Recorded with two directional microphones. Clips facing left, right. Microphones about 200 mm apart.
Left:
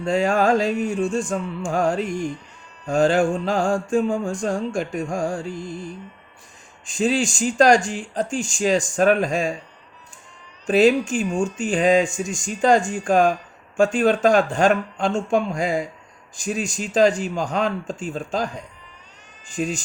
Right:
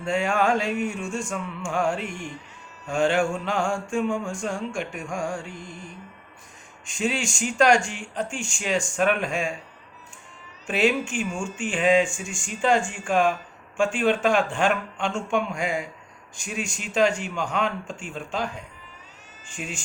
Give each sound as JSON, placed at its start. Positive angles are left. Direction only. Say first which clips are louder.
{"t": 0.0, "sound": "music", "louder": "left 4 dB", "side_deg": 35}
{"t": 10.7, "sound": "music", "louder": "left 7 dB", "side_deg": 35}